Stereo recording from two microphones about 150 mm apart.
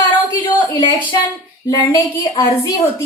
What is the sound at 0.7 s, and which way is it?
A woman's voice, 30° left (ahead or behind).